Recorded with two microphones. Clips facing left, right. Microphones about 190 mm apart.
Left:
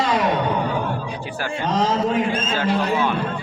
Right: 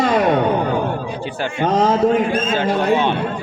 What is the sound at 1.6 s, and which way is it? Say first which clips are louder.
Speech: right 5 dB; 55° right (ahead or behind).